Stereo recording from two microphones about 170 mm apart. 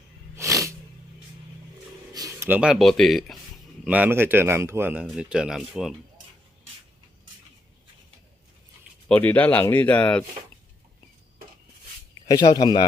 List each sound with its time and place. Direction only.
0.3 s a sound: 20° right (ahead or behind)
2.1 s speech: 15° right (ahead or behind); by 5.9 s centre (ahead or behind)
9.0 s speech: 10° left (ahead or behind)
12.3 s speech: 25° left (ahead or behind)